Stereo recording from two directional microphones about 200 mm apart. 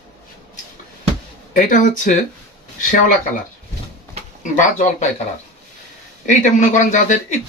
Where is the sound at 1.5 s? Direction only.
40° left (ahead or behind).